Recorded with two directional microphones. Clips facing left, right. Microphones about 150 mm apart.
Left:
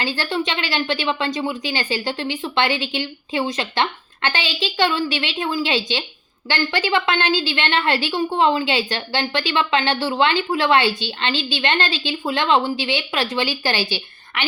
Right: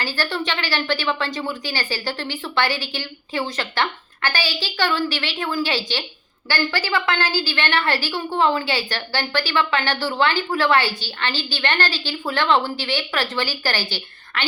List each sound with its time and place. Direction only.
0.0 s a woman's voice: 20° left (ahead or behind)